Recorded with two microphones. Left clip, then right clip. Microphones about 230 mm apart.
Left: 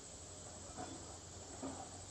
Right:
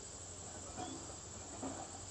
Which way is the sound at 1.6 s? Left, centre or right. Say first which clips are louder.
Right 2 dB; right.